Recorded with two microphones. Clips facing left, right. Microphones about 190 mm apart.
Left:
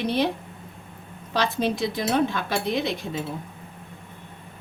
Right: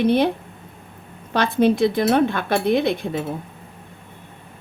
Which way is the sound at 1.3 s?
55° right (ahead or behind).